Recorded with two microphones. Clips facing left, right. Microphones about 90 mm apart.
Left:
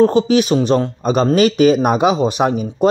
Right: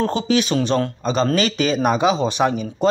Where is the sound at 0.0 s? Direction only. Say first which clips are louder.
Left 7 dB; 40° left (ahead or behind).